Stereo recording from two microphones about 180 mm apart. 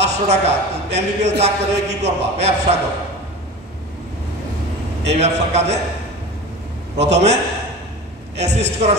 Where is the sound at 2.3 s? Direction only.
35° right (ahead or behind).